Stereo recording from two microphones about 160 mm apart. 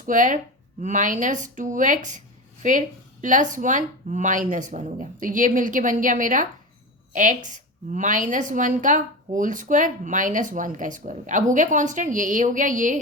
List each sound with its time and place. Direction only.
0.0 s a woman's voice: 55° right (ahead or behind)